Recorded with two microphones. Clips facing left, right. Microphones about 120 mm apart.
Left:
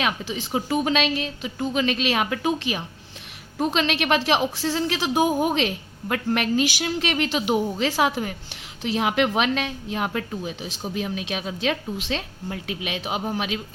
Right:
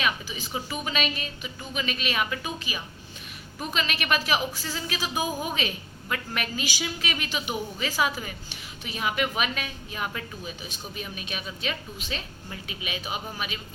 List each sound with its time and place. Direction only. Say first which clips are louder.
0.0 s a woman's voice: left 4 dB; 80° left
8.8 s a woman's voice: left 7 dB; 85° left
10.9 s a woman's voice: left 9 dB; 90° left; by 13.6 s 75° left (ahead or behind)